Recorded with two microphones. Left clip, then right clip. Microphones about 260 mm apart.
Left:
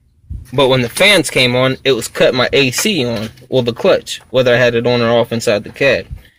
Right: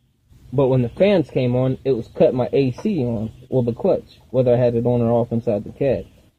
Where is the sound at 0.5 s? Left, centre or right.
Left.